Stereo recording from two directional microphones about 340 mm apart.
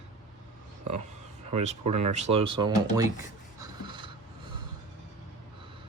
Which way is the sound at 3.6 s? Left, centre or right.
Centre.